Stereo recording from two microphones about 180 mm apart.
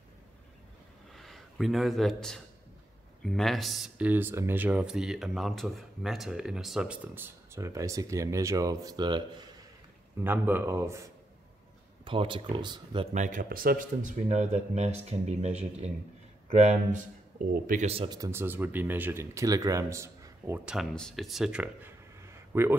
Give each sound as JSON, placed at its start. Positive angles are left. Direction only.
{"t": 1.1, "sound": "speech", "side_deg": 0}
{"t": 10.2, "sound": "speech", "side_deg": -10}
{"t": 12.0, "sound": "speech", "side_deg": -30}
{"t": 13.1, "sound": "speech", "side_deg": -45}